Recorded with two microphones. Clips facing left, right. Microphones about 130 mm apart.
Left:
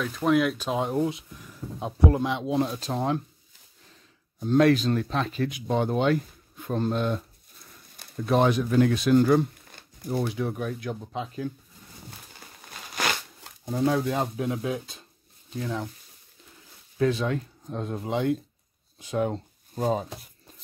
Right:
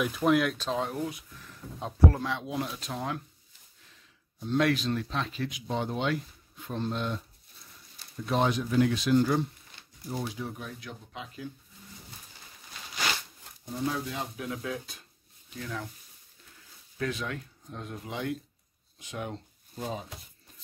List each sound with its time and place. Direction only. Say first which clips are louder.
0.0 s speech: left 2 dB; 5° right (ahead or behind)
0.6 s speech: left 5 dB; 15° left (ahead or behind)
1.4 s speech: left 4 dB; 10° left (ahead or behind); by 3.2 s 30° left (ahead or behind)
4.4 s speech: left 7 dB; 40° left (ahead or behind)
12.9 s shuffling cards: left 4 dB; 80° left; by 14.3 s 55° left (ahead or behind)
14.3 s speech: left 6 dB; 25° left (ahead or behind)
17.0 s speech: left 9 dB; 30° left (ahead or behind)